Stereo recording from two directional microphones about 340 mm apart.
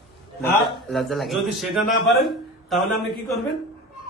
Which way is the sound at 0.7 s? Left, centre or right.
Centre.